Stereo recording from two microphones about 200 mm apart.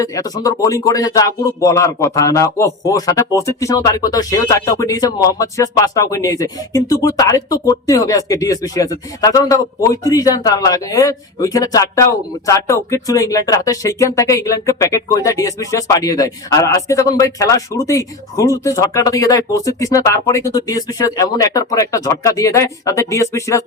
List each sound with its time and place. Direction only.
0.0 s speech: 15° left (ahead or behind)